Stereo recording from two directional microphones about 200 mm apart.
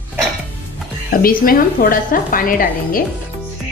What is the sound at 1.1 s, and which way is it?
Speech, 45° left (ahead or behind).